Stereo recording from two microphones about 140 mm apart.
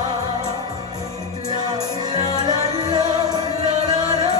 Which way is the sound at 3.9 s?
30° right (ahead or behind).